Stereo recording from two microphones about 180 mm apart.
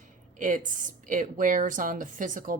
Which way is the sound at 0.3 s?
45° right (ahead or behind).